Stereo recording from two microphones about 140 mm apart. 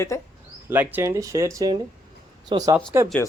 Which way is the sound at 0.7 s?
15° right (ahead or behind).